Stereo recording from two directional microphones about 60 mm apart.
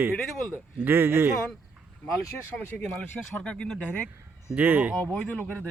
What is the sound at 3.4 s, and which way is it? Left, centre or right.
Speech, centre.